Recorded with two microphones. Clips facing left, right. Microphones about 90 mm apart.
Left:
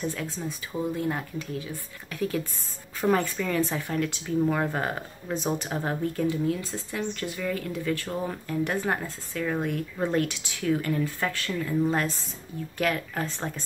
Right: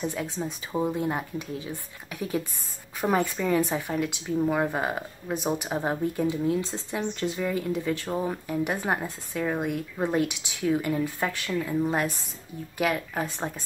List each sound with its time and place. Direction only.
0.0 s speech: 20° right (ahead or behind)